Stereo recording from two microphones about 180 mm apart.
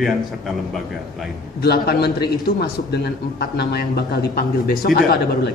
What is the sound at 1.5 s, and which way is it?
A man's voice, 60° left (ahead or behind).